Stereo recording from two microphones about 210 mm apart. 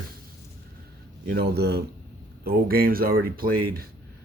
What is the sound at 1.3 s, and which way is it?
Speech, 50° right (ahead or behind).